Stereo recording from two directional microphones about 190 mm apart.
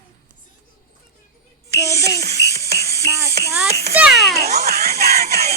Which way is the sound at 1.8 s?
15° left (ahead or behind).